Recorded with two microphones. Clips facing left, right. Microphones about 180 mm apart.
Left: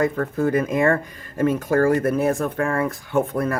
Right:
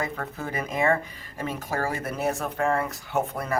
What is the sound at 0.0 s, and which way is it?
Speech, 50° left (ahead or behind).